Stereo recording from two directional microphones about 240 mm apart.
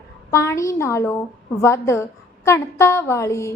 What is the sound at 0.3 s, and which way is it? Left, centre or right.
A woman's voice, centre.